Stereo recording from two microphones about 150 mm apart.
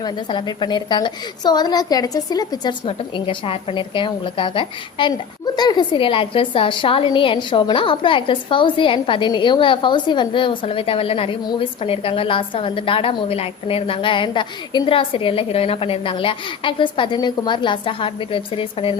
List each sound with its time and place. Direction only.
0.0 s a woman's voice: 30° left (ahead or behind)
2.8 s a woman's voice: 35° left (ahead or behind)